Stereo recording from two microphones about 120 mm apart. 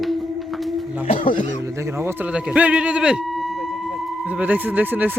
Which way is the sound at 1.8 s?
20° right (ahead or behind).